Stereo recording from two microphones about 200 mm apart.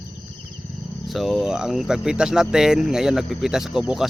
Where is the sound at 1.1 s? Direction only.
Centre (ahead or behind).